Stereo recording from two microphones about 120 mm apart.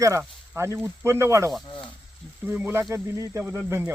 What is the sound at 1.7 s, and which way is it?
Speech, 40° left (ahead or behind).